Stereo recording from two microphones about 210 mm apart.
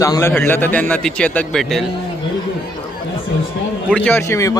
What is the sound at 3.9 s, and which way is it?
Speech, 5° left (ahead or behind).